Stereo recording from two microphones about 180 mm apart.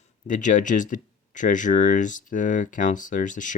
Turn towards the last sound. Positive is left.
turn(degrees=45)  # may be behind; listen again after turning